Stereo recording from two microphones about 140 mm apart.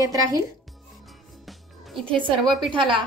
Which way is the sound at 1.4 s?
Centre (ahead or behind).